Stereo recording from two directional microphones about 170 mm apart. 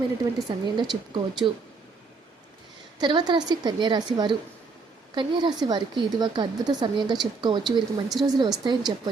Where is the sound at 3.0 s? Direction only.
25° right (ahead or behind).